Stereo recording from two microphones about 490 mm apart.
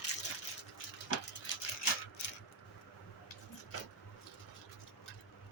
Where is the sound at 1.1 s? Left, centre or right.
Left.